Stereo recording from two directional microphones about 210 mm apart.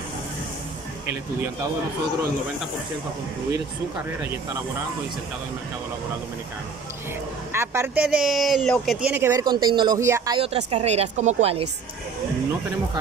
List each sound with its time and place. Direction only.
1.0 s speech: 15° right (ahead or behind)
7.5 s speech: 10° right (ahead or behind)
10.4 s a woman's voice: 30° right (ahead or behind)